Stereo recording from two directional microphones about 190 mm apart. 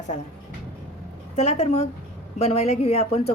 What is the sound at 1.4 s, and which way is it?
A woman's voice, 35° left (ahead or behind).